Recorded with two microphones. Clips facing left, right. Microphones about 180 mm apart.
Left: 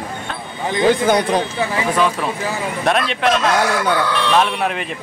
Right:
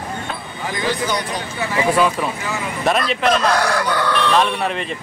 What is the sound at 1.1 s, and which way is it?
Speech, 55° left (ahead or behind).